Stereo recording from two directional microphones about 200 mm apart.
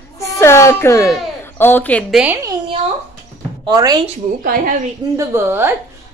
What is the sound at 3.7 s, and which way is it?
Speech, 20° right (ahead or behind).